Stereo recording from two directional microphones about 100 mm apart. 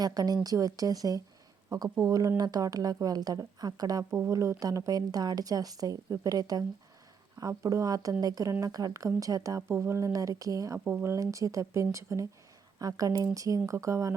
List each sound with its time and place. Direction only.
0.0 s a woman's voice: 40° right (ahead or behind)
10.8 s speech: 20° right (ahead or behind)
11.1 s a woman's voice: 30° right (ahead or behind)